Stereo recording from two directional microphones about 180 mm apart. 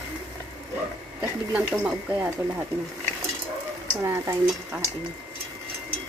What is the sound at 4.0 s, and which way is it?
Speech, 15° right (ahead or behind).